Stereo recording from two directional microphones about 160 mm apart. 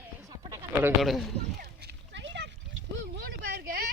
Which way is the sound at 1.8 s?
90° right.